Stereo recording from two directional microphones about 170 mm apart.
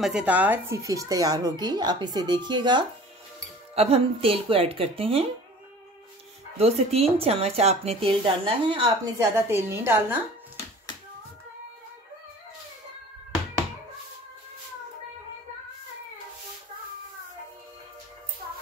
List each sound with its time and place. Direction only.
0.0 s speech: 5° right (ahead or behind); by 2.8 s 25° right (ahead or behind)
3.7 s speech: 35° right (ahead or behind)
6.6 s speech: 35° right (ahead or behind); by 10.1 s 15° right (ahead or behind)